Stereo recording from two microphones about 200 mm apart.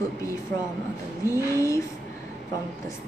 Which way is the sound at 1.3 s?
15° left (ahead or behind).